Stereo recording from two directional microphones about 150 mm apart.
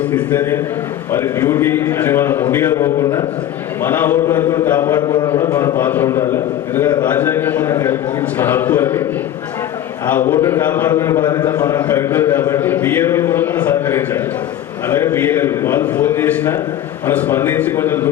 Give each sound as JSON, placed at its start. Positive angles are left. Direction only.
{"t": 0.1, "sound": "a man's voice", "side_deg": 10}
{"t": 4.9, "sound": "speech", "side_deg": 30}
{"t": 5.4, "sound": "a man's voice", "side_deg": 20}
{"t": 10.3, "sound": "a man's voice", "side_deg": 15}
{"t": 11.2, "sound": "a man's voice", "side_deg": 30}
{"t": 11.9, "sound": "a man's voice", "side_deg": 15}